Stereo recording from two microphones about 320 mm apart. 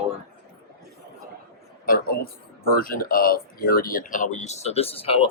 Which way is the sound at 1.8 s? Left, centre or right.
Left.